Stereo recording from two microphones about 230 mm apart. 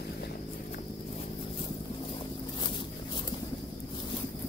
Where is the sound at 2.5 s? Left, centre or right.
Left.